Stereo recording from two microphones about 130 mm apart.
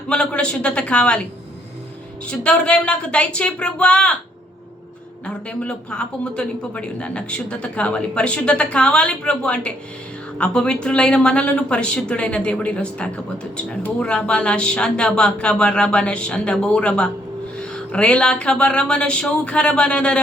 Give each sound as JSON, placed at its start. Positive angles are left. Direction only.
{"t": 0.1, "sound": "speech", "side_deg": 10}
{"t": 5.2, "sound": "speech", "side_deg": 10}